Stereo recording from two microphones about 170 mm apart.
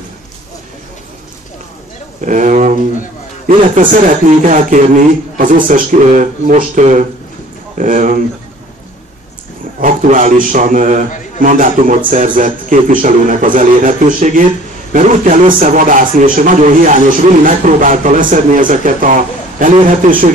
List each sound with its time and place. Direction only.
2.2 s a man's voice: 50° right (ahead or behind)
9.8 s a man's voice: 50° right (ahead or behind)